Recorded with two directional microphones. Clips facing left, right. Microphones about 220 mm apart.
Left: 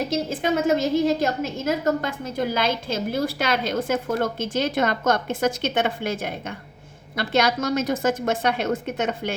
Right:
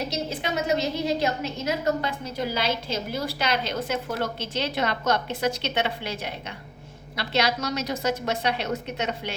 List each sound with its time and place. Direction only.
0.1 s a woman's voice: 50° left (ahead or behind)